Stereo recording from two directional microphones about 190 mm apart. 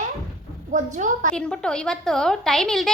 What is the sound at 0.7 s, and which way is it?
Speech, 40° right (ahead or behind).